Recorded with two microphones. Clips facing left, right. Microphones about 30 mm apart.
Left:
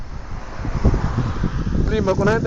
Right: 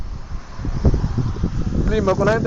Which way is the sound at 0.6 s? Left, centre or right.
Left.